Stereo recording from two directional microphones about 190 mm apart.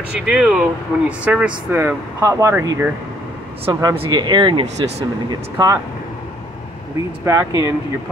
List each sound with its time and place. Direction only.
0.1 s speech: 5° right (ahead or behind)
3.6 s speech: 30° right (ahead or behind)
7.2 s speech: 15° right (ahead or behind)